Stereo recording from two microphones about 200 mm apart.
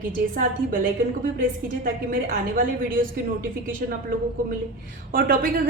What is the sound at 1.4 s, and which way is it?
A woman's voice, 45° right (ahead or behind).